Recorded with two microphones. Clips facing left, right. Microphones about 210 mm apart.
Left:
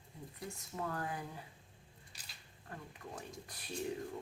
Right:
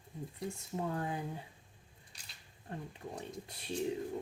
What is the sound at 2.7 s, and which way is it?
Speech, 25° right (ahead or behind).